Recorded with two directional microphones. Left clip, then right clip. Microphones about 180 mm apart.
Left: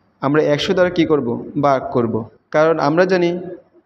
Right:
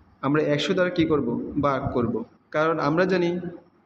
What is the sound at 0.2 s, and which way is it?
A man's voice, 35° left (ahead or behind).